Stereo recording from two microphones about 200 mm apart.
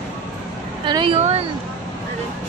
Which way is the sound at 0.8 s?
25° right (ahead or behind).